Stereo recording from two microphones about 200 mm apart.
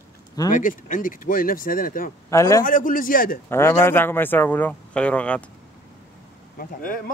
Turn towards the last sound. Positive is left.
turn(degrees=45)  # may be behind; listen again after turning